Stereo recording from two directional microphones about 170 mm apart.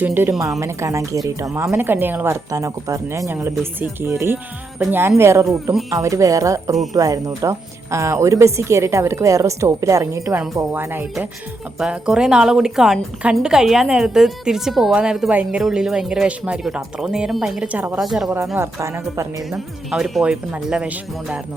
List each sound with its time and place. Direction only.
0.0 s a woman's voice: 15° right (ahead or behind)
0.3 s a woman's voice: centre (ahead or behind)
0.6 s a woman's voice: 20° right (ahead or behind)
18.5 s a woman's voice: 15° right (ahead or behind)
19.5 s a woman's voice: centre (ahead or behind)